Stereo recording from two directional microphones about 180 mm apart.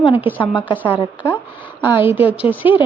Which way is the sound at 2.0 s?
10° right (ahead or behind).